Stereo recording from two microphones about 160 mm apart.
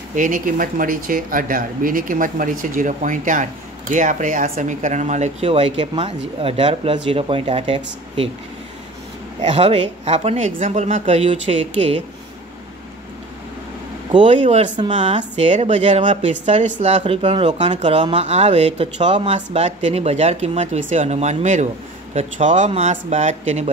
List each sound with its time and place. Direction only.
0.1 s speech: 55° right (ahead or behind); by 8.3 s 35° right (ahead or behind)
9.4 s speech: 40° right (ahead or behind)
14.2 s speech: 45° right (ahead or behind)
14.8 s speech: 35° right (ahead or behind)
15.1 s speech: 45° right (ahead or behind)